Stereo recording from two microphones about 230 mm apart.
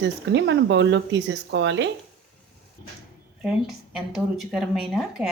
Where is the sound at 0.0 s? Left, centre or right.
Right.